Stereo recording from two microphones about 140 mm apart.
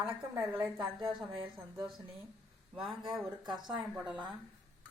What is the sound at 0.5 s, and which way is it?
Speech, 30° right (ahead or behind).